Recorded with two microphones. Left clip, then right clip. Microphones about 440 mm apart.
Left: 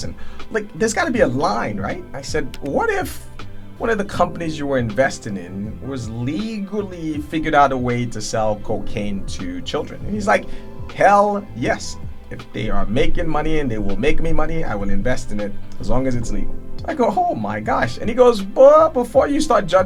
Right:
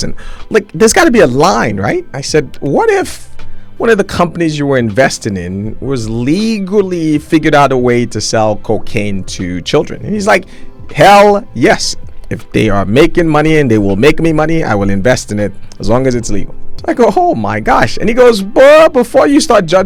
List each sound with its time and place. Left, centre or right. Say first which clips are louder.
0.5 s speech: right 12 dB; right
15.8 s speech: right 11 dB; right